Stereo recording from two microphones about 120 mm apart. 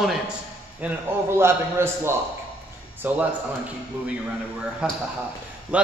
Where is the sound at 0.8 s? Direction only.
20° right (ahead or behind).